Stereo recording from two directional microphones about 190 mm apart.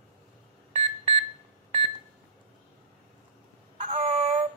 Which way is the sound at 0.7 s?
35° right (ahead or behind).